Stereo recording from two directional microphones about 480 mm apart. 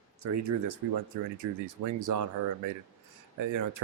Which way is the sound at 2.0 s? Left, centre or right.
Right.